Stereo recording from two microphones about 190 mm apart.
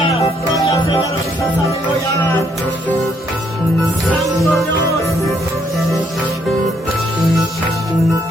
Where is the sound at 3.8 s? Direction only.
Centre (ahead or behind).